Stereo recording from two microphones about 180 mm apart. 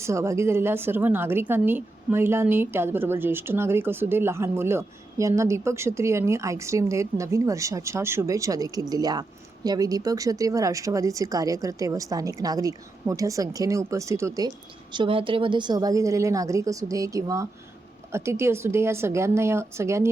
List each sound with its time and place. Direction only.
0.0 s a woman's voice: 15° right (ahead or behind)
14.9 s a woman's voice: 30° right (ahead or behind)